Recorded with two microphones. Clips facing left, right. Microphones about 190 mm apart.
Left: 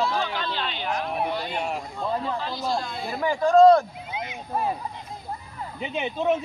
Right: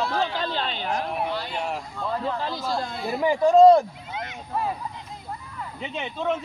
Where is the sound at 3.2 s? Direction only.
15° right (ahead or behind).